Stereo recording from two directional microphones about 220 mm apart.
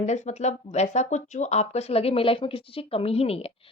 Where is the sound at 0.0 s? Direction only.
30° left (ahead or behind).